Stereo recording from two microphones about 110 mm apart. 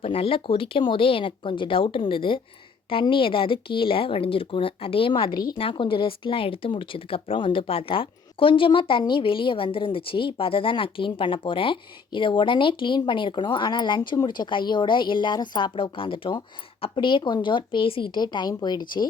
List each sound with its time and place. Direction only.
0.0 s speech: 55° left (ahead or behind)
5.3 s speech: 40° left (ahead or behind)
5.5 s speech: 50° left (ahead or behind)